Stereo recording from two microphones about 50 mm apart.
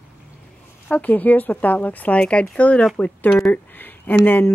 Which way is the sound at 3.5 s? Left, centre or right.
Left.